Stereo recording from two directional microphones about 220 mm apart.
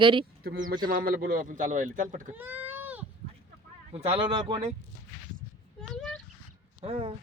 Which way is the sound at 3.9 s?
25° right (ahead or behind).